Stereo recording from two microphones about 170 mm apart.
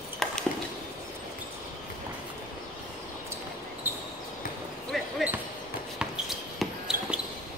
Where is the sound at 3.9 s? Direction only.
10° right (ahead or behind).